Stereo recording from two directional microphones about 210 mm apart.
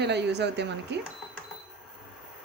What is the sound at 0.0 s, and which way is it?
Speech, 55° right (ahead or behind).